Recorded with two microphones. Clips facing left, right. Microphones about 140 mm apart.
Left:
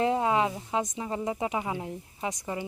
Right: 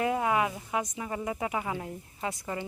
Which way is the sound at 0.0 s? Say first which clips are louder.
Left 2 dB; 25° left (ahead or behind).